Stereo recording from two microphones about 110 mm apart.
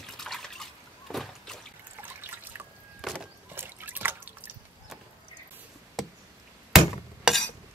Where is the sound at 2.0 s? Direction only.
20° right (ahead or behind).